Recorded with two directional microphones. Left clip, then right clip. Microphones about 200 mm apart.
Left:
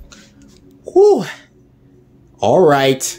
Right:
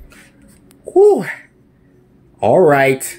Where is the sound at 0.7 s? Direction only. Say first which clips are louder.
Even; 10° left (ahead or behind).